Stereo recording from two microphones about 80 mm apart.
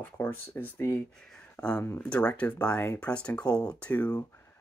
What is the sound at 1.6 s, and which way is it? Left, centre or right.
Speech, left.